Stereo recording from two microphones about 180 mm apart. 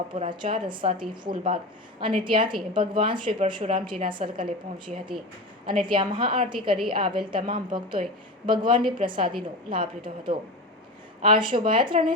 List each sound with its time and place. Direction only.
0.1 s a woman's voice: 30° right (ahead or behind)
5.6 s a woman's voice: 25° right (ahead or behind)